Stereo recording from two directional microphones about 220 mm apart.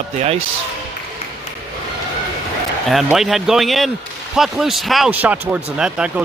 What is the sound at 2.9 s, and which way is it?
Speech, centre (ahead or behind).